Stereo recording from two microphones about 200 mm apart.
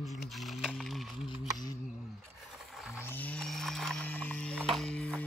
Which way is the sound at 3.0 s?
10° left (ahead or behind).